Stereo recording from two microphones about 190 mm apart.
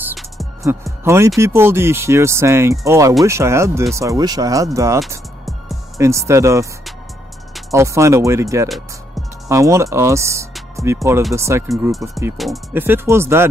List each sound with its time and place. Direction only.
0.6 s speech: 15° right (ahead or behind)
7.7 s speech: 15° right (ahead or behind)